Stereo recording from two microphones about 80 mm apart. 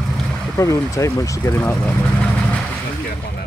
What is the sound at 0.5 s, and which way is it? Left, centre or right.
Speech, left.